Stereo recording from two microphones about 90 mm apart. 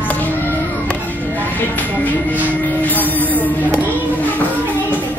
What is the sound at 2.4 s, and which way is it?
Music, 20° left (ahead or behind).